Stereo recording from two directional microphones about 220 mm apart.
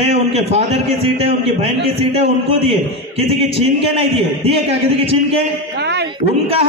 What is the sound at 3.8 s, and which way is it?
A man's voice, 25° right (ahead or behind).